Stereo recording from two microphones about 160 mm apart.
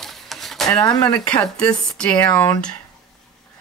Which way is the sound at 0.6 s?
20° left (ahead or behind).